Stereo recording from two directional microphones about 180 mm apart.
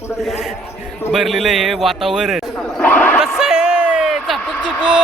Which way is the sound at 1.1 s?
Centre (ahead or behind).